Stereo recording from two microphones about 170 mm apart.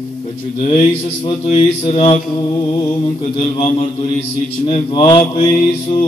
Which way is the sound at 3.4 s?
30° left (ahead or behind).